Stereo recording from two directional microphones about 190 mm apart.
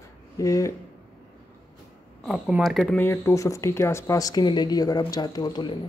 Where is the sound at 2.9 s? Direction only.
15° left (ahead or behind).